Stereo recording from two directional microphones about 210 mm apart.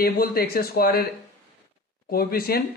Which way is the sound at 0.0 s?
45° left (ahead or behind).